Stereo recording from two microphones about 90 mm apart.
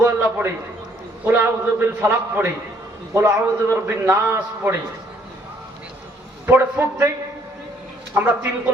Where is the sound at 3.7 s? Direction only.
25° right (ahead or behind).